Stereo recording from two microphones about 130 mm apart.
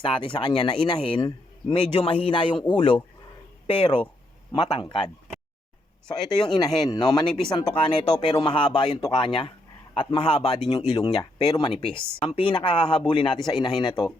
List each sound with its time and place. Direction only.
0.0 s speech: 40° left (ahead or behind)
11.7 s speech: 45° left (ahead or behind)